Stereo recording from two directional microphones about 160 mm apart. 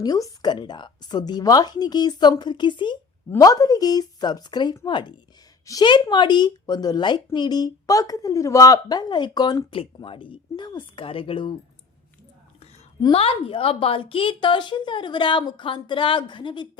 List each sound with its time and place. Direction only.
0.0 s a woman's voice: 25° left (ahead or behind)
13.0 s a woman's voice: 35° left (ahead or behind)